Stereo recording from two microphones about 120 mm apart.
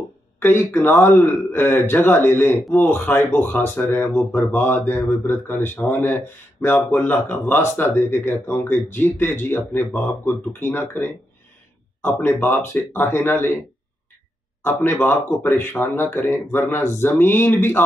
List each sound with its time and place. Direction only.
0.4 s speech: 20° left (ahead or behind)
14.6 s speech: 15° left (ahead or behind)